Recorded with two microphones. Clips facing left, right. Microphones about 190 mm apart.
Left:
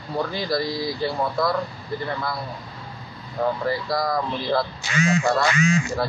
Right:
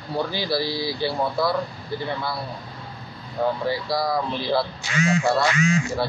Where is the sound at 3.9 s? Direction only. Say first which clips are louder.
Even; 5° right (ahead or behind).